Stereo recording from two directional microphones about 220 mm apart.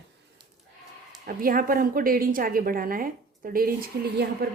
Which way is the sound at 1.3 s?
40° right (ahead or behind).